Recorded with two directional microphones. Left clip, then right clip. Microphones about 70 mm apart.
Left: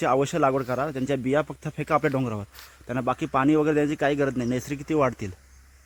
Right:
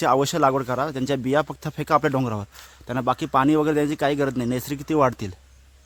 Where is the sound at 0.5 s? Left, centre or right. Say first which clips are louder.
Right 2 dB; centre.